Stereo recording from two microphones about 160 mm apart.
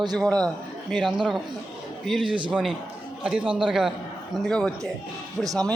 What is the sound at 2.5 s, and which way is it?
A man's voice, 10° right (ahead or behind).